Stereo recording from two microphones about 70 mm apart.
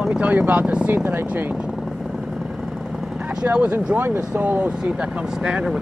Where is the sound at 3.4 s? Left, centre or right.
Right.